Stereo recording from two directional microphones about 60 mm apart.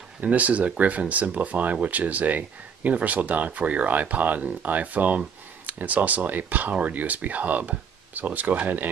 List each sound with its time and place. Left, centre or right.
0.2 s speech: right